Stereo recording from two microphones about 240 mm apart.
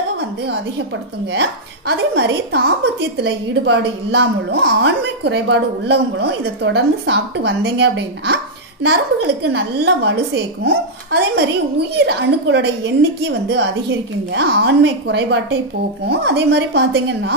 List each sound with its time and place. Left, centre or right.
0.5 s a woman's voice: right